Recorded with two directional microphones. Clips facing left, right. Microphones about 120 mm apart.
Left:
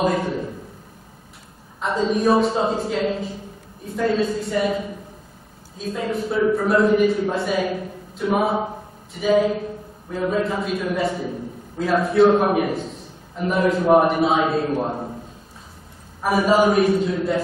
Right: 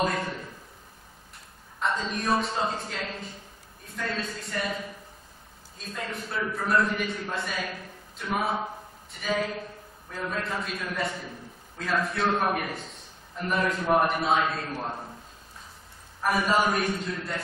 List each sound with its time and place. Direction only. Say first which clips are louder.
1.8 s a man's voice: left 8 dB; centre (ahead or behind)
5.8 s a man's voice: left 11 dB; 5° left (ahead or behind)
16.2 s a man's voice: left 7 dB; 5° left (ahead or behind)